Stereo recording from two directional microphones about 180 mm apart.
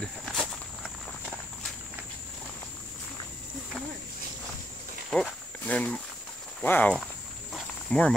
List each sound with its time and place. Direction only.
0.0 s walk: centre (ahead or behind)
5.1 s speech: 5° left (ahead or behind)
7.5 s wild animals: 5° left (ahead or behind)